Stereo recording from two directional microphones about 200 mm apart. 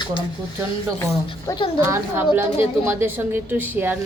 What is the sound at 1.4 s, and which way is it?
Speech, 20° left (ahead or behind).